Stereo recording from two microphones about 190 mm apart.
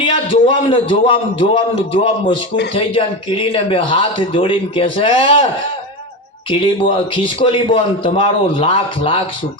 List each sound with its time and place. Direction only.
0.0 s speech: 30° left (ahead or behind)
6.5 s speech: 30° left (ahead or behind)